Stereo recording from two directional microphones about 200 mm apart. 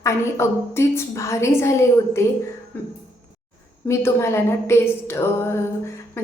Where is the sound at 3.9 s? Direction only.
15° left (ahead or behind).